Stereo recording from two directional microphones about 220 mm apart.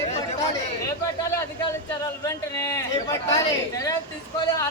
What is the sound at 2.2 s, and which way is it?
Speech, 15° left (ahead or behind).